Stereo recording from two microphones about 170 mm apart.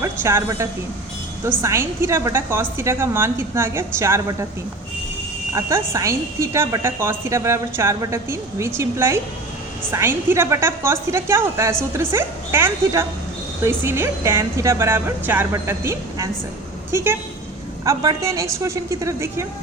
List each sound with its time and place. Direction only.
0.0 s a woman's voice: 15° right (ahead or behind)
5.5 s a woman's voice: 15° right (ahead or behind)